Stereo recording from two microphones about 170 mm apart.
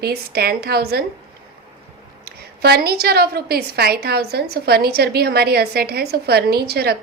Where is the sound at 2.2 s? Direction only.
65° right (ahead or behind).